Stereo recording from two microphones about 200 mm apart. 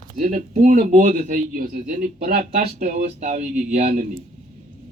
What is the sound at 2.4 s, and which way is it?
Speech, 30° right (ahead or behind).